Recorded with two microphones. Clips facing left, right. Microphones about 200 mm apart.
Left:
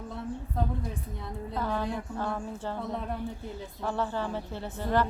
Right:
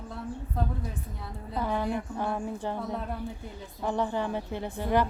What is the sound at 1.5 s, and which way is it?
A woman's voice, 15° right (ahead or behind).